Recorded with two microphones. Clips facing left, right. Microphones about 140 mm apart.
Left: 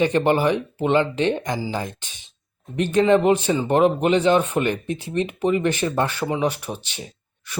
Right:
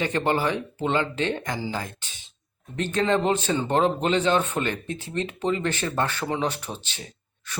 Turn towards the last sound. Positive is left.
turn(degrees=15)  # may be behind; listen again after turning